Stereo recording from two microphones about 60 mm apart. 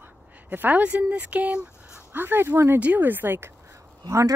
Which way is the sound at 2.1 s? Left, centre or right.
Right.